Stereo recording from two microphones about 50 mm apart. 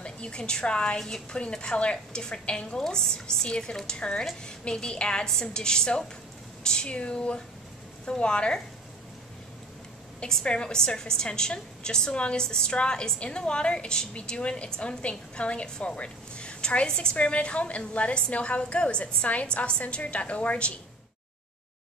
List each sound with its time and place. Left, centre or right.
0.0 s a woman's voice: centre
10.2 s a woman's voice: centre